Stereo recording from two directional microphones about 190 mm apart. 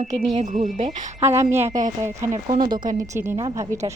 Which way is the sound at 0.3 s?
40° right (ahead or behind).